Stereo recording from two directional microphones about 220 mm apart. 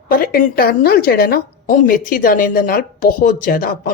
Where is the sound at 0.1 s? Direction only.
40° left (ahead or behind).